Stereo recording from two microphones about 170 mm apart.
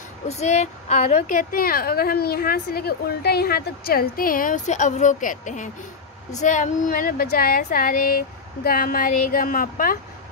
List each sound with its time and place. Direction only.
0.3 s a woman's voice: 40° left (ahead or behind)